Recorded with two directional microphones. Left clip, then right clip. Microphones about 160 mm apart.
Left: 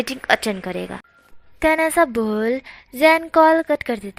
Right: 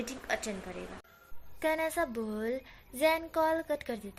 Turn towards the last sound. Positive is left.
turn(degrees=30)  # may be behind; listen again after turning